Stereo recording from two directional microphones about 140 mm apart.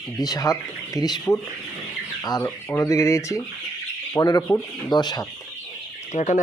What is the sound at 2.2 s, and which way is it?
Speech, 30° left (ahead or behind).